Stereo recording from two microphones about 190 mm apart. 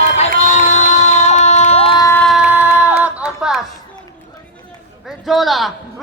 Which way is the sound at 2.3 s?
5° right (ahead or behind).